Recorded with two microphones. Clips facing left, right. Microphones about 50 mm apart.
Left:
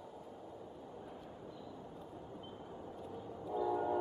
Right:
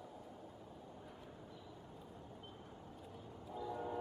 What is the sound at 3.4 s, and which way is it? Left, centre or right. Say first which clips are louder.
Train: left 9 dB; centre.